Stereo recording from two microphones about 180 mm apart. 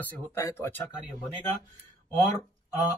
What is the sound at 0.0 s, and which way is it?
Speech, 10° left (ahead or behind).